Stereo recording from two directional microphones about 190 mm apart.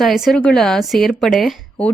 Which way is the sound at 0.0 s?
Centre (ahead or behind).